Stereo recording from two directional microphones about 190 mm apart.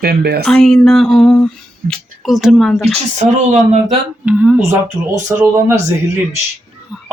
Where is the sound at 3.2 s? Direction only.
35° right (ahead or behind).